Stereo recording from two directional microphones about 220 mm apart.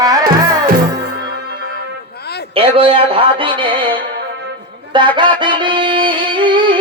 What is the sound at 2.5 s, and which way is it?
Speech, 25° right (ahead or behind).